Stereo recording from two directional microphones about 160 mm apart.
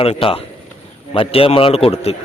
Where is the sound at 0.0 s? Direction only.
35° left (ahead or behind).